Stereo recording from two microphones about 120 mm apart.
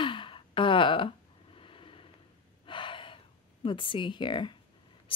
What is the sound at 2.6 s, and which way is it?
Gasp, 45° left (ahead or behind).